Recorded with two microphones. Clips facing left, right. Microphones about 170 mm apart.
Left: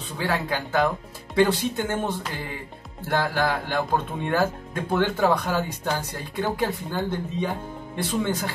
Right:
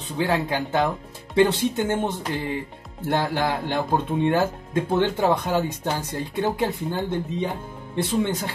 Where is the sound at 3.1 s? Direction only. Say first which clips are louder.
Right 1 dB; 20° right (ahead or behind).